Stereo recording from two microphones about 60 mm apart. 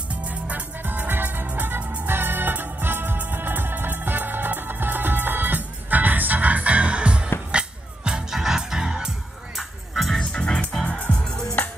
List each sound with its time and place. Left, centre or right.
0.1 s music: right
9.6 s music: centre
10.1 s music: centre